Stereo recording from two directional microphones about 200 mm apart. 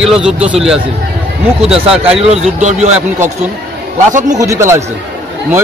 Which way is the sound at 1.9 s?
5° right (ahead or behind).